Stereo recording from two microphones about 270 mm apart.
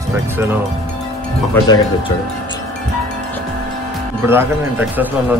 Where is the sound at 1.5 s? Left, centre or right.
Centre.